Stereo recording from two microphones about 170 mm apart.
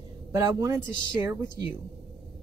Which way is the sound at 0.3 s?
20° right (ahead or behind).